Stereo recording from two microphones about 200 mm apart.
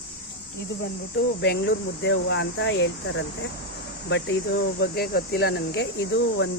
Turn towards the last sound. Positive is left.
turn(degrees=55)  # may be behind; listen again after turning